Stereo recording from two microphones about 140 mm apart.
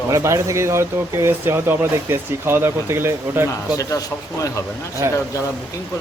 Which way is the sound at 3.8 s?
25° left (ahead or behind).